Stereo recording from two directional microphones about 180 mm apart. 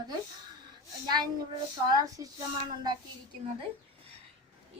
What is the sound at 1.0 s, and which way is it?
A child's voice, 25° right (ahead or behind).